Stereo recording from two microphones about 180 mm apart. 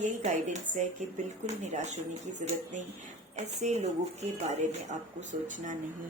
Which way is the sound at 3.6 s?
40° right (ahead or behind).